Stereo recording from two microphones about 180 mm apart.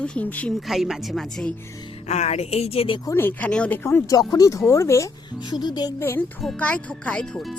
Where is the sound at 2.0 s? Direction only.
40° left (ahead or behind).